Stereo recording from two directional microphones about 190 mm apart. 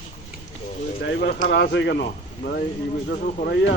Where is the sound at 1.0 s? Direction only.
60° left (ahead or behind).